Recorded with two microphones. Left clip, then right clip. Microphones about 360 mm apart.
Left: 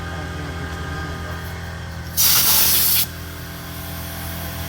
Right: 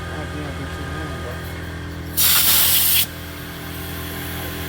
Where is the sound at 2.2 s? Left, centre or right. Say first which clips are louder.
Even; left.